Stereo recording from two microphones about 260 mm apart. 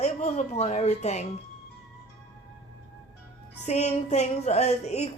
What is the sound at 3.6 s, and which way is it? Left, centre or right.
Speech, left.